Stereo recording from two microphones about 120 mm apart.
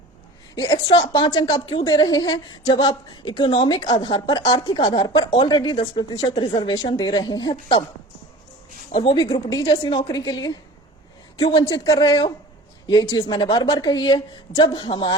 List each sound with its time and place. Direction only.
0.5 s a woman's voice: 35° left (ahead or behind)
5.7 s speech: 50° left (ahead or behind)
6.1 s a woman's voice: 35° left (ahead or behind)
8.9 s speech: 45° left (ahead or behind)
9.1 s a woman's voice: 30° left (ahead or behind)
9.6 s a woman's voice: 45° left (ahead or behind); by 13.2 s 30° left (ahead or behind)
13.2 s a woman's voice: 40° left (ahead or behind)